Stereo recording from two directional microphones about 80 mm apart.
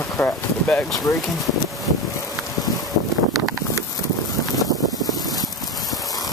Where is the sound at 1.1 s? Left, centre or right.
Left.